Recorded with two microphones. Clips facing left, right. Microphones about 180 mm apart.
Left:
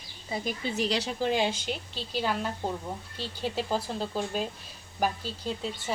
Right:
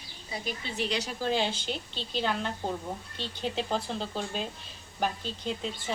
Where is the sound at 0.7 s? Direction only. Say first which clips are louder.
Left 2 dB; 35° left (ahead or behind).